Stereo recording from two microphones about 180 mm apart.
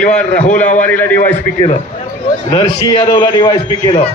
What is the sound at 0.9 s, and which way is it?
Speech, 10° left (ahead or behind).